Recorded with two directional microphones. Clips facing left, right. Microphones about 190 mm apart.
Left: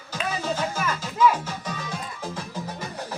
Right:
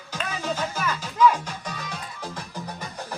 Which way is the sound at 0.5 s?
10° left (ahead or behind).